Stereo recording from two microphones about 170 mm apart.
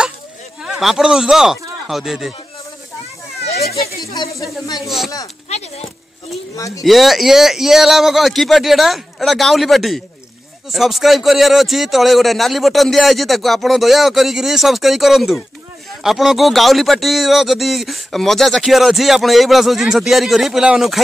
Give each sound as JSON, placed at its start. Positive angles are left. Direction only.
{"t": 0.6, "sound": "speech", "side_deg": -5}
{"t": 4.1, "sound": "speech", "side_deg": 20}
{"t": 4.8, "sound": "speech", "side_deg": 0}
{"t": 6.8, "sound": "speech", "side_deg": 0}